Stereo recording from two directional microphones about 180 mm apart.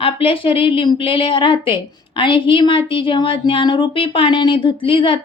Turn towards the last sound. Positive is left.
turn(degrees=30)  # may be behind; listen again after turning